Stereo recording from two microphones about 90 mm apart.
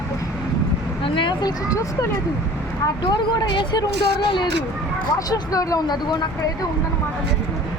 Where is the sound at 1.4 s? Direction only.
40° left (ahead or behind).